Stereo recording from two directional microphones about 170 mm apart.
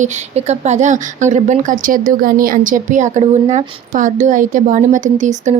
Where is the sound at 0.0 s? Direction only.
40° right (ahead or behind).